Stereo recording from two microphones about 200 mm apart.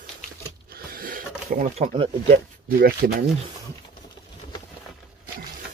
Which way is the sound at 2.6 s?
50° right (ahead or behind).